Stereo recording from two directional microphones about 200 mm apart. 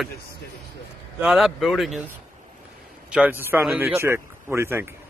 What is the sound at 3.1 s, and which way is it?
Speech, 5° right (ahead or behind).